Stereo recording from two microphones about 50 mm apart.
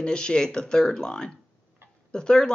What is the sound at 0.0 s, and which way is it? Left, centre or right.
Speech, centre.